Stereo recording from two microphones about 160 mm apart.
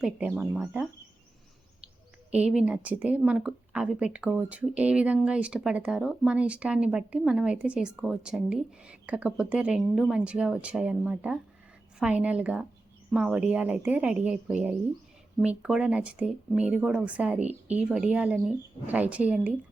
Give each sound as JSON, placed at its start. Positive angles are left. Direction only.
{"t": 0.0, "sound": "a woman's voice", "side_deg": -10}
{"t": 2.3, "sound": "a woman's voice", "side_deg": -5}